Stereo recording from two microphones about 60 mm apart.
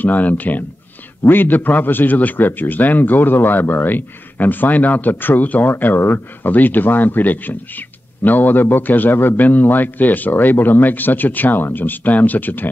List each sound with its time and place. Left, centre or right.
0.0 s a man's voice: left